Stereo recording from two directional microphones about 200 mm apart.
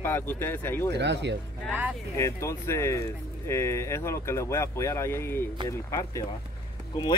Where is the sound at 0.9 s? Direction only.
60° right (ahead or behind).